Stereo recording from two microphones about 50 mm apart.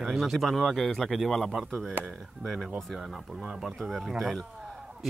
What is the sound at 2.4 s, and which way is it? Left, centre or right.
Speech, centre.